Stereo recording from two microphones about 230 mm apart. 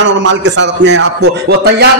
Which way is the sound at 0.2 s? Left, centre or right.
Right.